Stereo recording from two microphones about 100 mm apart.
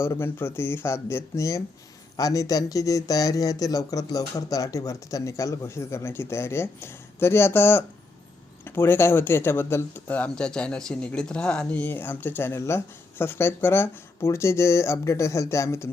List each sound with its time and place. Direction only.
0.0 s speech: 25° left (ahead or behind)